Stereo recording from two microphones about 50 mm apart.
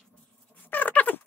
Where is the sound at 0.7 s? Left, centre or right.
Left.